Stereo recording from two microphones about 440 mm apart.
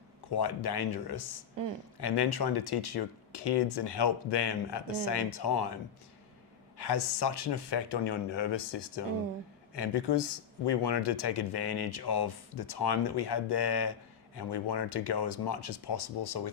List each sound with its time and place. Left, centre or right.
0.3 s speech: left
6.7 s speech: left